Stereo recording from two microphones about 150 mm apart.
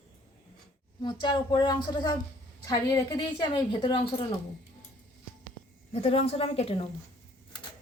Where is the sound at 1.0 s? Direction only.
30° left (ahead or behind).